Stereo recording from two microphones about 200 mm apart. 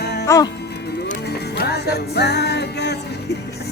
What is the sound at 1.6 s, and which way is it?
Music, 55° left (ahead or behind).